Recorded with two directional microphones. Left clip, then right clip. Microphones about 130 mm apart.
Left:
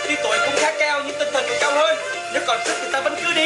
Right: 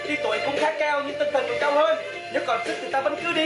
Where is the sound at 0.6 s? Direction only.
5° right (ahead or behind).